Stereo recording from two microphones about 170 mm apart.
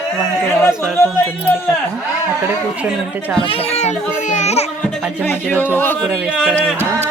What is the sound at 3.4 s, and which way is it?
Speech, 35° left (ahead or behind).